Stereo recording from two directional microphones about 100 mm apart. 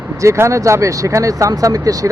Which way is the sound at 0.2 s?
30° right (ahead or behind).